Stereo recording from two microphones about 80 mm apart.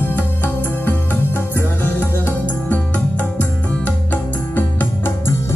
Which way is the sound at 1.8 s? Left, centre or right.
Left.